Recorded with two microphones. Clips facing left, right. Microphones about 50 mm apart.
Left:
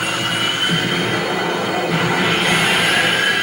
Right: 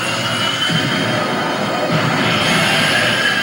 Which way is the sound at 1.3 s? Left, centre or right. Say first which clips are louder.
Right 1 dB; left.